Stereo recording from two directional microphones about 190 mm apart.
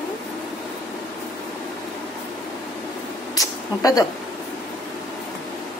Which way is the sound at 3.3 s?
20° left (ahead or behind).